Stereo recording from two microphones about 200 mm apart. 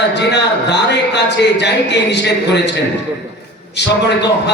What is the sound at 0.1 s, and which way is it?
Speech, 60° left (ahead or behind).